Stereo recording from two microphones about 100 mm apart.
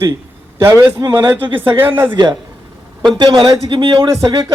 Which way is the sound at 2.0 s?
45° right (ahead or behind).